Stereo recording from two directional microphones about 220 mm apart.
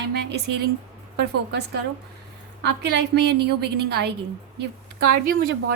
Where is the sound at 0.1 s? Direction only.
50° right (ahead or behind).